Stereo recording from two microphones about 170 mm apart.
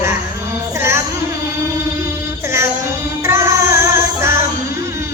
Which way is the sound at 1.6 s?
20° right (ahead or behind).